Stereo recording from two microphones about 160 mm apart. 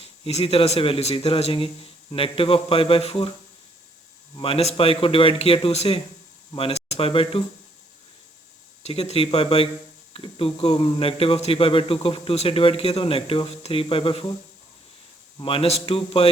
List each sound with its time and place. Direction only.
0.0 s speech: 40° left (ahead or behind)
4.4 s speech: 35° left (ahead or behind)
8.8 s speech: 40° left (ahead or behind)
15.4 s speech: 35° left (ahead or behind)